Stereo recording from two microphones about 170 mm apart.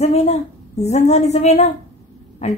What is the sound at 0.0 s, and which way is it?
A woman's voice, 40° left (ahead or behind).